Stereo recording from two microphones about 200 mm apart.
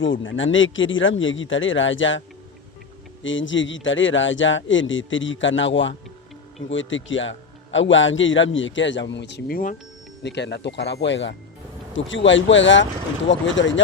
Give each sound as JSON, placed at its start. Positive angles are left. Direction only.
{"t": 0.0, "sound": "a man's voice", "side_deg": 70}
{"t": 3.2, "sound": "a man's voice", "side_deg": 70}